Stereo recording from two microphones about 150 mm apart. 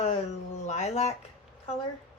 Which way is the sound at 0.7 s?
50° left (ahead or behind).